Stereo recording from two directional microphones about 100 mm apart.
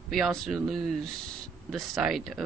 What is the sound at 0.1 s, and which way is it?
Speech, centre (ahead or behind).